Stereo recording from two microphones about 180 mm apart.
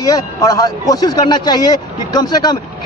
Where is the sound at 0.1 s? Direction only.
20° left (ahead or behind).